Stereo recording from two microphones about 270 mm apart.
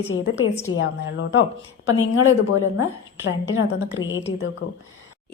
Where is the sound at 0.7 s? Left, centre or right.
Left.